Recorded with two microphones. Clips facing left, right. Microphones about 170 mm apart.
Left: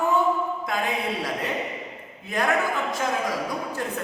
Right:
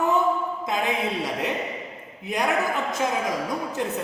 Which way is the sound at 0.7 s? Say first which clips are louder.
Right 5 dB; 20° right (ahead or behind).